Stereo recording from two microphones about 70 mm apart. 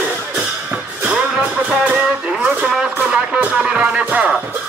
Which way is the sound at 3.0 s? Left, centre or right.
Centre.